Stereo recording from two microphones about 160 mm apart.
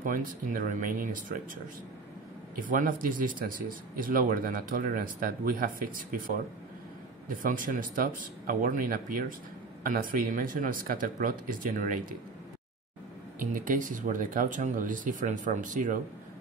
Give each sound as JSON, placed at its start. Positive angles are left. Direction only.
{"t": 0.0, "sound": "speech", "side_deg": -55}
{"t": 2.7, "sound": "speech", "side_deg": -60}
{"t": 7.2, "sound": "speech", "side_deg": -60}
{"t": 13.4, "sound": "speech", "side_deg": -55}